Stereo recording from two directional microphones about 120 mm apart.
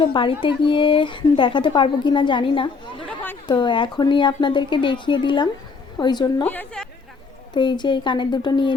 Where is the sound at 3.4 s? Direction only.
40° left (ahead or behind).